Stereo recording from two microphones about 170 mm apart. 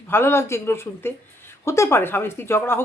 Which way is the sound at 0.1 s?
15° left (ahead or behind).